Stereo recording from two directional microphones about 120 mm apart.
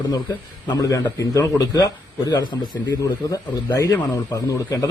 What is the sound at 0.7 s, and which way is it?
A man's voice, 30° left (ahead or behind).